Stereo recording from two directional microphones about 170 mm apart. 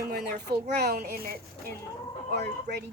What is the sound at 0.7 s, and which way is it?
Speech, 65° right (ahead or behind).